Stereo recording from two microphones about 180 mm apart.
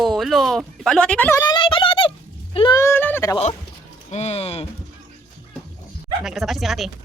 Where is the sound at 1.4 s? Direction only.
25° left (ahead or behind).